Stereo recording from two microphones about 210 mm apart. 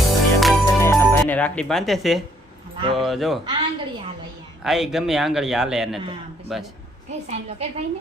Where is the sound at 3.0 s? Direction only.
Centre (ahead or behind).